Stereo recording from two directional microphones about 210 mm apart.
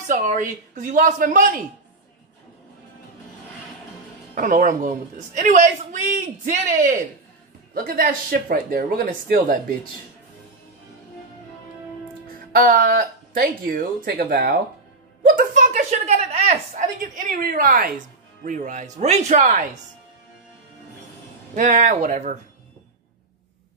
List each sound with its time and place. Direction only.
0.0 s a man's voice: 35° right (ahead or behind)
4.4 s a man's voice: 40° right (ahead or behind)
12.5 s a woman's voice: 40° right (ahead or behind)
21.5 s a man's voice: 35° right (ahead or behind)